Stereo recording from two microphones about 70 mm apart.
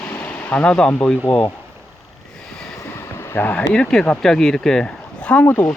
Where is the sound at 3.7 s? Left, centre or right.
Centre.